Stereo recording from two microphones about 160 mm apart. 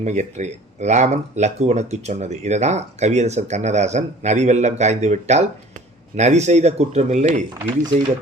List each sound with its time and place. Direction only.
0.0 s speech: 45° right (ahead or behind)